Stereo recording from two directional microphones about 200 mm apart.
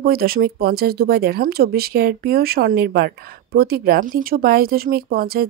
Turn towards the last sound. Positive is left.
turn(degrees=-50)  # may be behind; listen again after turning